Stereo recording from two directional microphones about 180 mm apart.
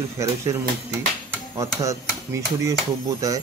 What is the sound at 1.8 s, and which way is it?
Speech, 15° right (ahead or behind).